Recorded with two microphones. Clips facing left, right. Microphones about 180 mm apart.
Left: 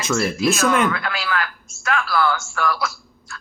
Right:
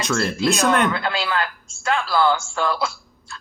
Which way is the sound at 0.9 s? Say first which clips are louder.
Right 1 dB; 30° right (ahead or behind).